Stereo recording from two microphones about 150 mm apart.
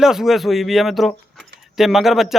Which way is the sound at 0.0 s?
5° right (ahead or behind).